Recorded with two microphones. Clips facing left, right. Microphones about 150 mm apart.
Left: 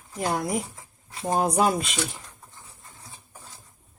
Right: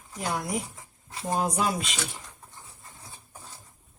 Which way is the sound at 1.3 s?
45° left (ahead or behind).